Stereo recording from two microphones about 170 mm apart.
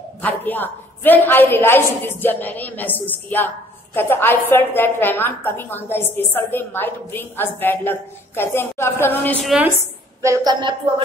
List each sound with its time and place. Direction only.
0.2 s a woman's voice: 10° left (ahead or behind)
9.5 s a woman's voice: 10° right (ahead or behind)